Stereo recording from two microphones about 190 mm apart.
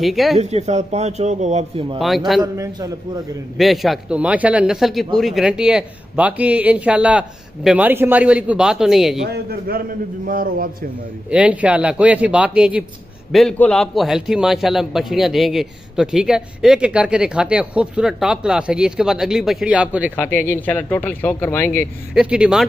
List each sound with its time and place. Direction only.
0.0 s a man's voice: centre (ahead or behind)
0.4 s a man's voice: 35° right (ahead or behind)
2.0 s a man's voice: centre (ahead or behind)
2.4 s a man's voice: 15° right (ahead or behind)
3.5 s a man's voice: centre (ahead or behind)
9.2 s a man's voice: 55° right (ahead or behind)
11.2 s a man's voice: 5° right (ahead or behind)
20.2 s speech: 10° left (ahead or behind)
22.1 s a man's voice: 5° right (ahead or behind)